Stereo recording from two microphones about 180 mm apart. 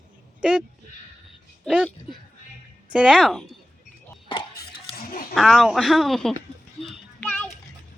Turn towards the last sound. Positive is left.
turn(degrees=5)  # may be behind; listen again after turning